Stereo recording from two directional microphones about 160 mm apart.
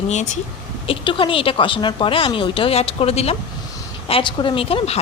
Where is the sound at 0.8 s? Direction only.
35° left (ahead or behind).